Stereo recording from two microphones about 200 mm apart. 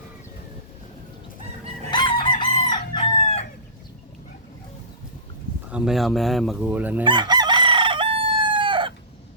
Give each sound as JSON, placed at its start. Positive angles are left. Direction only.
{"t": 1.9, "sound": "chicken", "side_deg": 20}
{"t": 5.7, "sound": "speech", "side_deg": 0}
{"t": 7.0, "sound": "chicken", "side_deg": -25}